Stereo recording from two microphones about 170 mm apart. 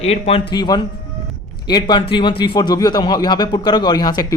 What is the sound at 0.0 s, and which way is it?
Speech, 35° left (ahead or behind).